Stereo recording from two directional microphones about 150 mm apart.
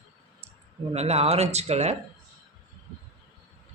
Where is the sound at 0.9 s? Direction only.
45° right (ahead or behind).